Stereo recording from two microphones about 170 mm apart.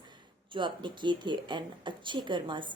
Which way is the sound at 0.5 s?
30° right (ahead or behind).